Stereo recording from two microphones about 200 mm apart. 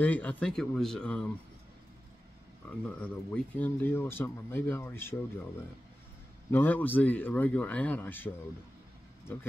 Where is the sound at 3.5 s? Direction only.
10° left (ahead or behind).